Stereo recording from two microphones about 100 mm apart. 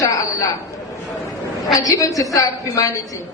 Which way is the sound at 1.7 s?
35° left (ahead or behind).